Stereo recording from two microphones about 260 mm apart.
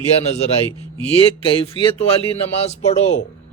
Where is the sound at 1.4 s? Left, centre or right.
Left.